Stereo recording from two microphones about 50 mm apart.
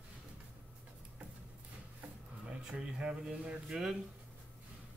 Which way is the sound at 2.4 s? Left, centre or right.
Centre.